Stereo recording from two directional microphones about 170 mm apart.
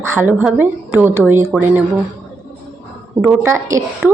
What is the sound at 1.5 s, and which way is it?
Speech, centre (ahead or behind).